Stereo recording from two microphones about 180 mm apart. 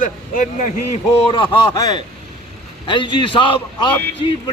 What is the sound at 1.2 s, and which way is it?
A man's voice, 30° left (ahead or behind).